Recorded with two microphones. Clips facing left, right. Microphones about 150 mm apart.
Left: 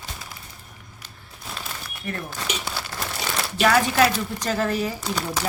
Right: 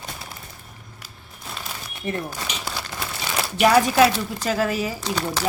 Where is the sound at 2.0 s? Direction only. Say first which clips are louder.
Right 3 dB; 20° right (ahead or behind).